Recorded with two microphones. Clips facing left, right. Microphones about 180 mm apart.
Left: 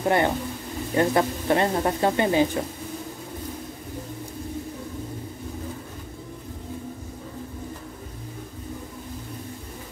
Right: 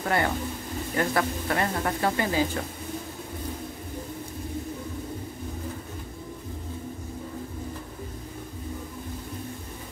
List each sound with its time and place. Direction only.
0.0 s speech: 20° left (ahead or behind)